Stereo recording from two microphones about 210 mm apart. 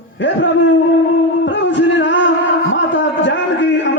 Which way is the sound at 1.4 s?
60° left (ahead or behind).